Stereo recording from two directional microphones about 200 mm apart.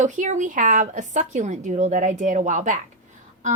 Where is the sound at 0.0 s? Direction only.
40° right (ahead or behind).